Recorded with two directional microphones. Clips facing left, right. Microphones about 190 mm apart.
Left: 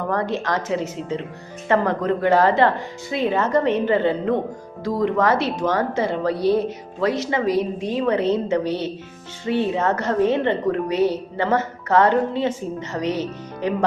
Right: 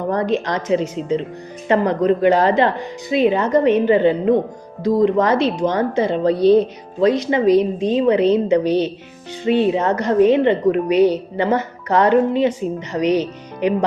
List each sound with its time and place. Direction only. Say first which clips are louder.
0.1 s a woman's voice: right 4 dB; 20° right (ahead or behind)